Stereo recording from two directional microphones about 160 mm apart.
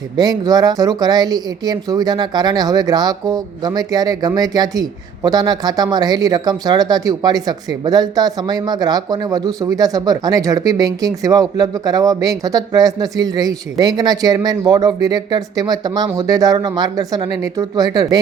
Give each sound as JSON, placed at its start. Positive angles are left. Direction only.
{"t": 0.2, "sound": "speech", "side_deg": -25}